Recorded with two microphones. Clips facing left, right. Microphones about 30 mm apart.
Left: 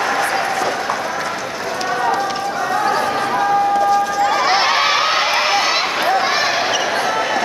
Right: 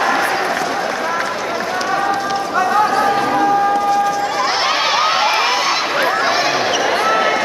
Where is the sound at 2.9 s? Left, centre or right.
Centre.